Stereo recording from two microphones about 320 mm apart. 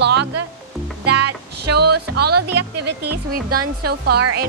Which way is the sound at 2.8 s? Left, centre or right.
Right.